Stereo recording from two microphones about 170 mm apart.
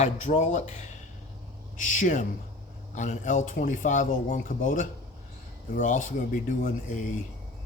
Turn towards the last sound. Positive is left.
turn(degrees=50)  # may be behind; listen again after turning